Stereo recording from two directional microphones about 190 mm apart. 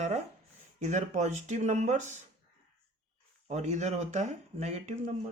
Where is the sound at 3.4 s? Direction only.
35° right (ahead or behind).